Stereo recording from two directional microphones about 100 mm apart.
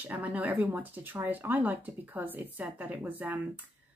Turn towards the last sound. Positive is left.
turn(degrees=-15)  # may be behind; listen again after turning